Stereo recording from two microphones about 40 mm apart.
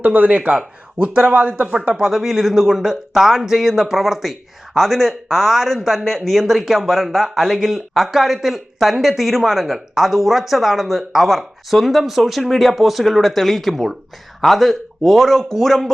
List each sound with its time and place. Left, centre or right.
0.0 s speech: right
1.9 s speech: centre
2.2 s speech: centre